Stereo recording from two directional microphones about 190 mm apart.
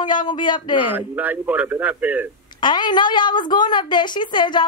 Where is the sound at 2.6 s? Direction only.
25° left (ahead or behind).